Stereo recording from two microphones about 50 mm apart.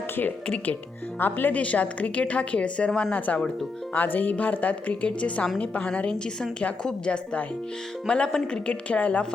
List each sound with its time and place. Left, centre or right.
0.4 s a woman's voice: left
1.2 s a woman's voice: left
1.5 s a woman's voice: left